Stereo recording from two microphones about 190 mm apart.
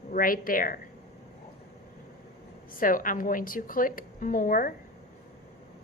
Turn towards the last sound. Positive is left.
turn(degrees=45)  # may be behind; listen again after turning